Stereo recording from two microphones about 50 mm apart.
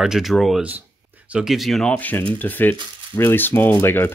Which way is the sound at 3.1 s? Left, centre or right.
Left.